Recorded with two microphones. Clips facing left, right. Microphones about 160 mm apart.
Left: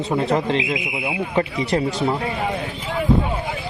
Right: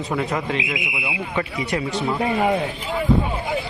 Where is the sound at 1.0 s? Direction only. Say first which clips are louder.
Left 5 dB; 40° left (ahead or behind).